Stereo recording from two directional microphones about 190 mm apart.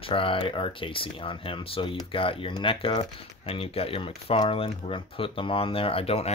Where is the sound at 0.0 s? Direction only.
30° left (ahead or behind).